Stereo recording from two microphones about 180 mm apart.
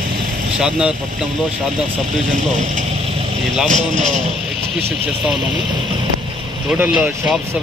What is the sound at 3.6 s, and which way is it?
Speech, 45° right (ahead or behind).